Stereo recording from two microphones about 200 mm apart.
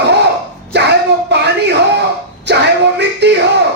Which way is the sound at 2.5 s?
60° right (ahead or behind).